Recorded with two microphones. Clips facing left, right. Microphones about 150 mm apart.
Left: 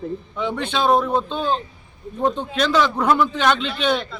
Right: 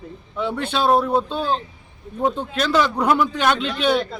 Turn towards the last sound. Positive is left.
turn(degrees=-10)  # may be behind; listen again after turning